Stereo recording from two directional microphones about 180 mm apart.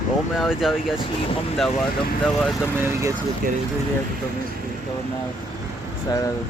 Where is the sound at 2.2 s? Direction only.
Centre (ahead or behind).